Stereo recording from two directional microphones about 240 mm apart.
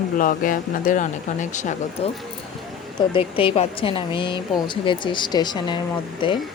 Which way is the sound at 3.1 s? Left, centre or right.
Left.